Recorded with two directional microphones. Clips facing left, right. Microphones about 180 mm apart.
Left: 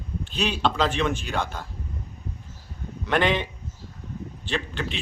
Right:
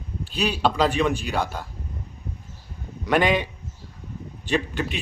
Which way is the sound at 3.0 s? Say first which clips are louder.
Right 2 dB; 10° right (ahead or behind).